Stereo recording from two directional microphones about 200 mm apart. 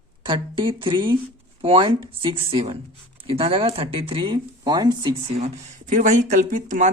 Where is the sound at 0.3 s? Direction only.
25° right (ahead or behind).